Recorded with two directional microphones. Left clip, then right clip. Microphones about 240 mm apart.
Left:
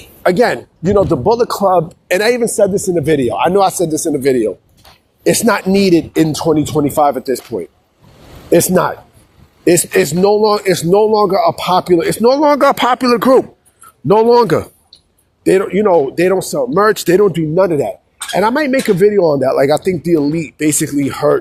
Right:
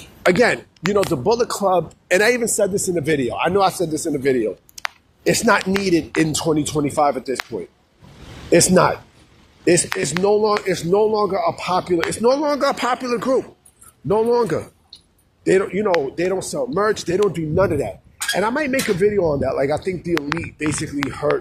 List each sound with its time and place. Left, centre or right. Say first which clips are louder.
0.3 s a man's voice: left 4 dB; left
2.0 s a man's voice: left 1 dB; left